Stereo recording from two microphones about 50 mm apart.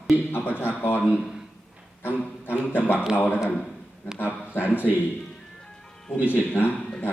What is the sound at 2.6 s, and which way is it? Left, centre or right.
Speech, left.